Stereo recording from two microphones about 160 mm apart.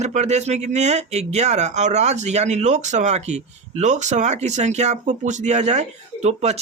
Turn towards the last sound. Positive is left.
turn(degrees=-45)  # may be behind; listen again after turning